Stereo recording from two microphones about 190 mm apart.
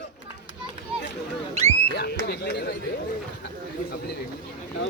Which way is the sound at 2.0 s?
60° left (ahead or behind).